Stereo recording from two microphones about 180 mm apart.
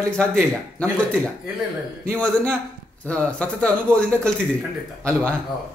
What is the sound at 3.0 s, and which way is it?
Speech, 5° left (ahead or behind).